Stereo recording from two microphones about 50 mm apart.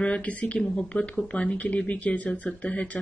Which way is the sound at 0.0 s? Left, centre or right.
Left.